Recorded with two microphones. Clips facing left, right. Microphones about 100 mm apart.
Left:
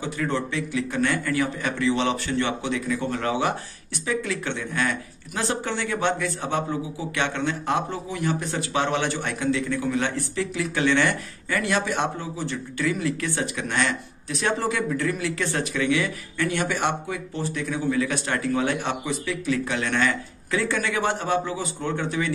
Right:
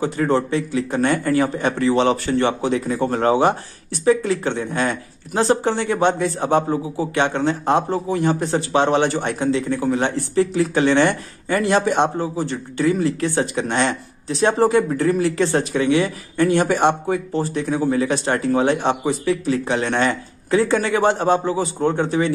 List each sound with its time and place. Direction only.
0.0 s speech: 35° right (ahead or behind)